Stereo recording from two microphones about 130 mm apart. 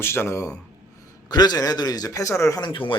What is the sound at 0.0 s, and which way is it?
Speech, 20° left (ahead or behind).